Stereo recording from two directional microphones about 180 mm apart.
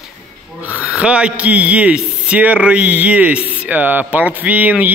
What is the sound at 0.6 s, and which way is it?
A man's voice, 10° right (ahead or behind).